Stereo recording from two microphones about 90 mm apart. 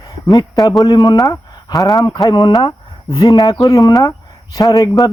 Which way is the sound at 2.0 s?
45° left (ahead or behind).